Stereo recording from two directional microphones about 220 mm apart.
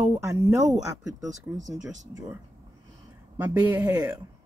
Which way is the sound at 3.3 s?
10° right (ahead or behind).